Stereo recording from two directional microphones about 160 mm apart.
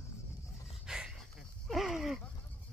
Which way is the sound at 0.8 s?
5° right (ahead or behind).